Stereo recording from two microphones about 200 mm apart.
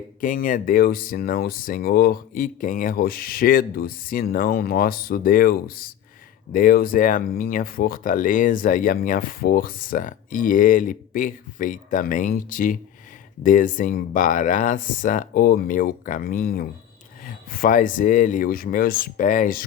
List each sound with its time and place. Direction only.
0.2 s speech: 45° left (ahead or behind)